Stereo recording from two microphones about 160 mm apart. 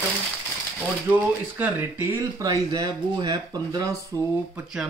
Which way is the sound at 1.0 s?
10° right (ahead or behind).